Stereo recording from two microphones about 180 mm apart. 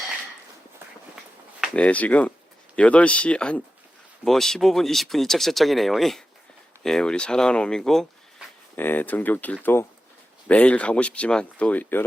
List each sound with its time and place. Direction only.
1.6 s speech: 5° left (ahead or behind)